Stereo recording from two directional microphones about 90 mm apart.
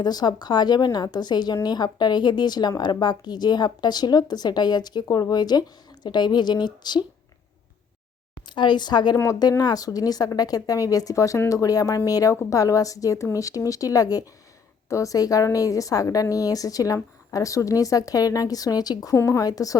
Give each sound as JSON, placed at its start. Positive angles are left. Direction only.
{"t": 0.0, "sound": "a woman's voice", "side_deg": 50}
{"t": 8.4, "sound": "speech", "side_deg": 55}
{"t": 9.1, "sound": "a woman's voice", "side_deg": 35}
{"t": 9.4, "sound": "a woman's voice", "side_deg": 50}